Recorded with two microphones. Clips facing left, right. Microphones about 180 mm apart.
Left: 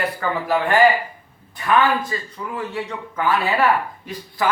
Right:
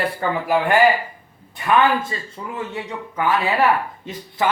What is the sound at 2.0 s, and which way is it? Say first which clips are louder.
Speech: left 1 dB; 25° right (ahead or behind).